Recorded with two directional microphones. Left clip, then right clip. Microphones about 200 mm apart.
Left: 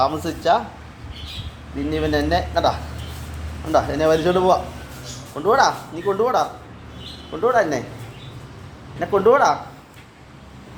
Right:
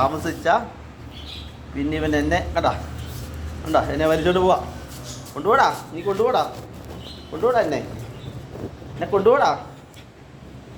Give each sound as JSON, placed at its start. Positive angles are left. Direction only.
{"t": 0.0, "sound": "speech", "side_deg": 10}
{"t": 1.9, "sound": "speech", "side_deg": 5}
{"t": 7.4, "sound": "speech", "side_deg": 0}
{"t": 9.0, "sound": "speech", "side_deg": 0}